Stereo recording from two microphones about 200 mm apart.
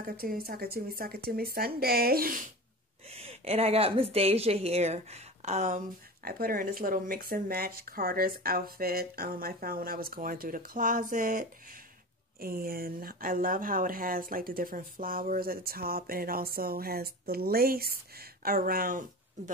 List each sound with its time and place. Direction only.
0.0 s speech: 50° right (ahead or behind)
3.1 s a woman's voice: 30° right (ahead or behind)
6.2 s speech: 45° right (ahead or behind)